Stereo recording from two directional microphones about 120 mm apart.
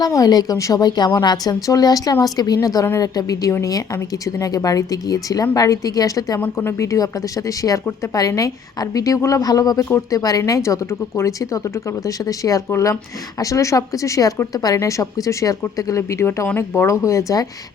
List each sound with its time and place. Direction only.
0.0 s a woman's voice: 30° left (ahead or behind)
6.4 s speech: 20° left (ahead or behind)